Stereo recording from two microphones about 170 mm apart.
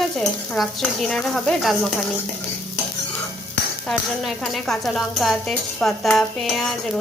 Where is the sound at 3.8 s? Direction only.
Centre (ahead or behind).